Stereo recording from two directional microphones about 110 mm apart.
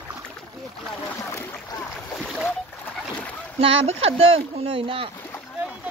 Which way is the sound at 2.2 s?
5° left (ahead or behind).